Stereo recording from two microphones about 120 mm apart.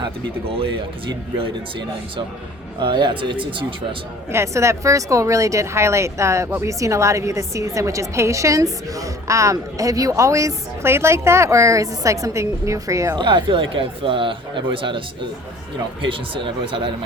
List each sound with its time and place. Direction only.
0.0 s speech: 50° right (ahead or behind)
2.8 s speech: 40° right (ahead or behind)
4.3 s speech: 25° right (ahead or behind)
13.1 s speech: 40° right (ahead or behind)